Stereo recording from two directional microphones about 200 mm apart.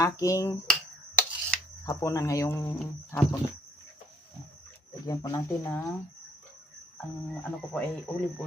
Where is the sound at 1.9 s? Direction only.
15° left (ahead or behind).